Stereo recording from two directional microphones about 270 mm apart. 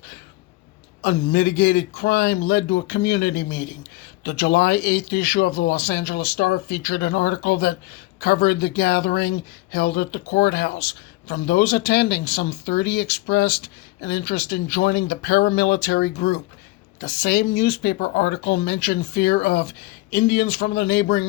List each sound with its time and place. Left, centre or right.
1.0 s speech: left